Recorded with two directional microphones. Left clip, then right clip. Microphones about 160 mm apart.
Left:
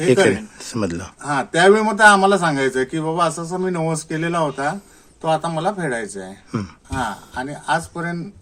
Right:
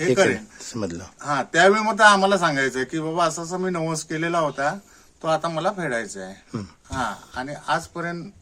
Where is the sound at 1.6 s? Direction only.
Centre (ahead or behind).